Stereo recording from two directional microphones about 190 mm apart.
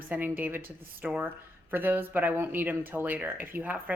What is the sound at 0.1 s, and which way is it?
Speech, 10° right (ahead or behind).